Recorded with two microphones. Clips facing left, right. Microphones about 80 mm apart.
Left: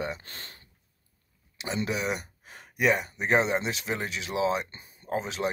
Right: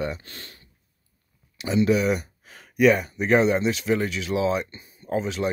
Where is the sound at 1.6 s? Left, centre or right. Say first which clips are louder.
Right 9 dB; left.